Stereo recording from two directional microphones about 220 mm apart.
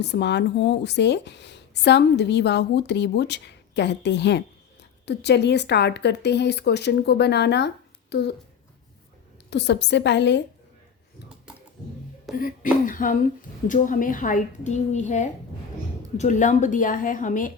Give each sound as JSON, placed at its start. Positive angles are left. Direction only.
{"t": 0.0, "sound": "speech", "side_deg": 50}
{"t": 9.5, "sound": "speech", "side_deg": 50}
{"t": 12.3, "sound": "speech", "side_deg": 0}
{"t": 12.8, "sound": "a woman's voice", "side_deg": 40}